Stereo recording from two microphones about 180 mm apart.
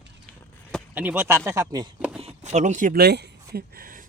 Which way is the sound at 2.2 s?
40° right (ahead or behind).